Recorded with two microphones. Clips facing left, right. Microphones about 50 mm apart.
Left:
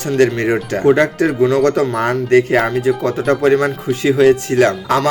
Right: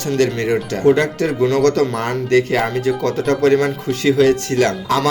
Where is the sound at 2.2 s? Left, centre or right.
Left.